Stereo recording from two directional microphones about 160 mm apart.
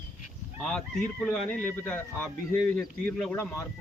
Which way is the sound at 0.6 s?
5° left (ahead or behind).